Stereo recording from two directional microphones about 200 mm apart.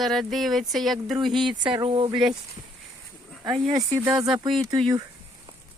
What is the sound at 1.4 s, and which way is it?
Speech, 25° right (ahead or behind).